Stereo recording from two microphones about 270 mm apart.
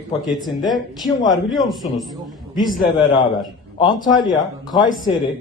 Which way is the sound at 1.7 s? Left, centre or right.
Centre.